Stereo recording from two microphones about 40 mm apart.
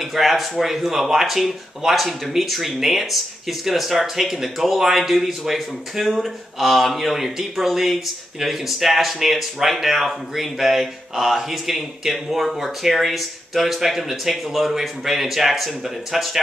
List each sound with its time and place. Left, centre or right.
0.0 s speech: centre